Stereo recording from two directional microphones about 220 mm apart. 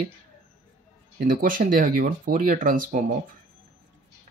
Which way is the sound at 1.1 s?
40° right (ahead or behind).